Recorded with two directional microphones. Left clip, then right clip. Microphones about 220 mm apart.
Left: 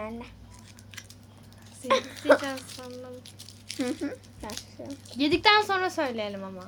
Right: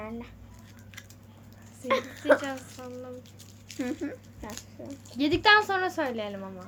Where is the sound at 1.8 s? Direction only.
20° left (ahead or behind).